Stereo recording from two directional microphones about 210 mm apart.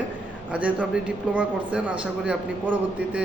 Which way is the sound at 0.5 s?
5° right (ahead or behind).